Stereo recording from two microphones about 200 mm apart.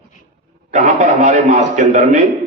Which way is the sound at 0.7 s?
40° right (ahead or behind).